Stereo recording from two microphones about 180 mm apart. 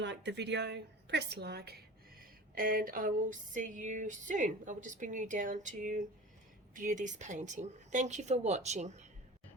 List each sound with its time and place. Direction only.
0.0 s a woman's voice: 75° right (ahead or behind); by 9.0 s 40° right (ahead or behind)